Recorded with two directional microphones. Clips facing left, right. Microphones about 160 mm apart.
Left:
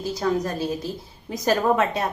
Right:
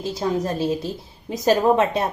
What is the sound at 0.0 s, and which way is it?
A woman's voice, 25° right (ahead or behind).